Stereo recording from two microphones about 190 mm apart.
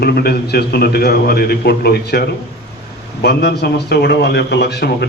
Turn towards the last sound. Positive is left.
turn(degrees=60)  # may be behind; listen again after turning